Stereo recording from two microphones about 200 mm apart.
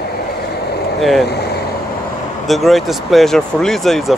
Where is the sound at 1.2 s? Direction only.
55° left (ahead or behind).